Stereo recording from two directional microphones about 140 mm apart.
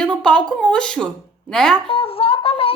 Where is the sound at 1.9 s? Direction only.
40° left (ahead or behind).